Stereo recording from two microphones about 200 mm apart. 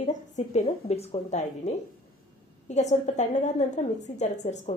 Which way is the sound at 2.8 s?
35° left (ahead or behind).